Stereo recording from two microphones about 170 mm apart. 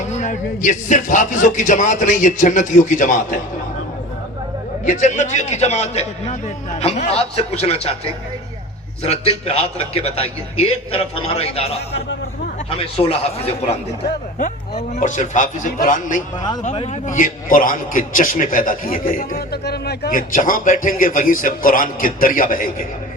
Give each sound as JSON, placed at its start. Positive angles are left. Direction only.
{"t": 0.1, "sound": "a man's voice", "side_deg": 45}
{"t": 4.9, "sound": "a man's voice", "side_deg": 45}
{"t": 9.0, "sound": "a man's voice", "side_deg": 35}
{"t": 13.0, "sound": "a man's voice", "side_deg": 35}
{"t": 19.6, "sound": "a man's voice", "side_deg": 70}